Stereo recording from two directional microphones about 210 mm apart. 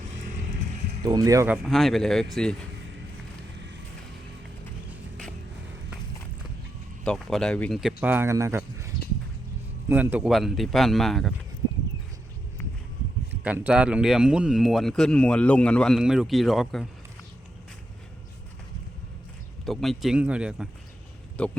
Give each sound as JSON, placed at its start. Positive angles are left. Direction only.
{"t": 1.0, "sound": "speech", "side_deg": -15}
{"t": 1.6, "sound": "speech", "side_deg": 0}
{"t": 7.0, "sound": "speech", "side_deg": 5}
{"t": 9.9, "sound": "speech", "side_deg": -10}
{"t": 13.4, "sound": "speech", "side_deg": -5}
{"t": 19.6, "sound": "speech", "side_deg": 0}